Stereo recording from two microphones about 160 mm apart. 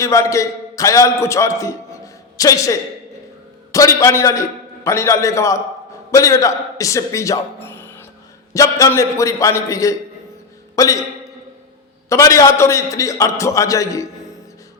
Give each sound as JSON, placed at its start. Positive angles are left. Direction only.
{"t": 0.0, "sound": "a man's voice", "side_deg": 20}
{"t": 12.0, "sound": "a man's voice", "side_deg": 20}